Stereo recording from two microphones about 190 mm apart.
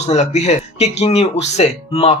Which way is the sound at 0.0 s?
35° left (ahead or behind).